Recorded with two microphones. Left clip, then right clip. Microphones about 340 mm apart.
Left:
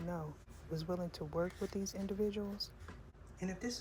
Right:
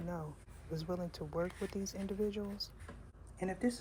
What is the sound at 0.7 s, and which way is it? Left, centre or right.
Speech, centre.